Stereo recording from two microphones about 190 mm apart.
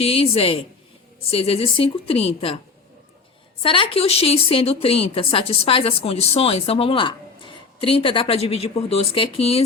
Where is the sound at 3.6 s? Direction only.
25° left (ahead or behind).